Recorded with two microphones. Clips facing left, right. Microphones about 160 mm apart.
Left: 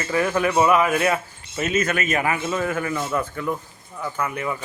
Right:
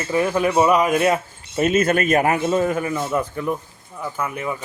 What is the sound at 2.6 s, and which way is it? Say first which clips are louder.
A man's voice: right 3 dB; 20° right (ahead or behind).